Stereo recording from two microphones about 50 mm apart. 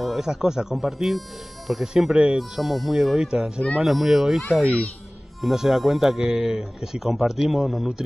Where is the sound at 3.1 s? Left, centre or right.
Centre.